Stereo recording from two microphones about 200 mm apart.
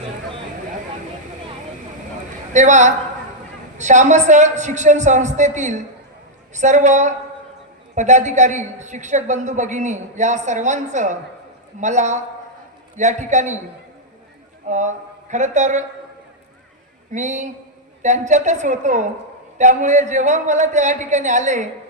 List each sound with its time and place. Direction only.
2.5 s a woman's voice: 35° right (ahead or behind)
14.7 s speech: 35° right (ahead or behind)
17.1 s a woman's voice: 35° right (ahead or behind)